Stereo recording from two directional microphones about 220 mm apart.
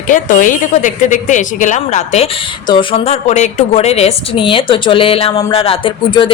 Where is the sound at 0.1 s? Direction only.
35° left (ahead or behind).